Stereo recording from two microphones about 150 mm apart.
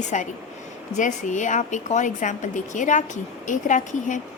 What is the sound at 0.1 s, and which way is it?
A woman's voice, 55° left (ahead or behind).